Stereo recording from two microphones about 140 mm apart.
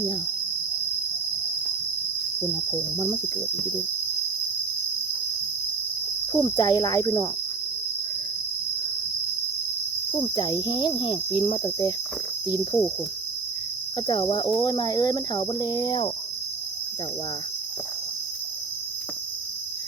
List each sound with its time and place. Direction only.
6.3 s speech: 30° left (ahead or behind)
10.1 s cricket: 40° left (ahead or behind)
14.1 s cricket: 35° left (ahead or behind)